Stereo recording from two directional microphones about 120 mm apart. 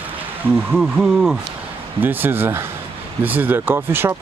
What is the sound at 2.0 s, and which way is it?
Speech, 15° right (ahead or behind).